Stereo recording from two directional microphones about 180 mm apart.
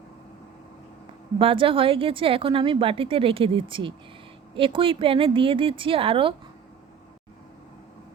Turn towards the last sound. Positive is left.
turn(degrees=-30)  # may be behind; listen again after turning